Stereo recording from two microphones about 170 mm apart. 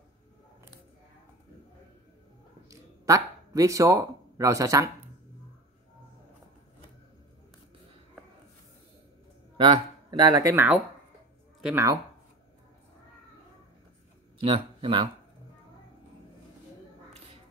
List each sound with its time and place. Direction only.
2.7 s a man's voice: 20° right (ahead or behind)
9.6 s speech: 25° right (ahead or behind)
14.4 s speech: 30° right (ahead or behind)